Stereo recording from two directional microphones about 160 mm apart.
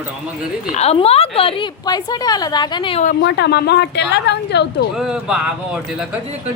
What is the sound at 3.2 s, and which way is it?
A woman's voice, 90° left.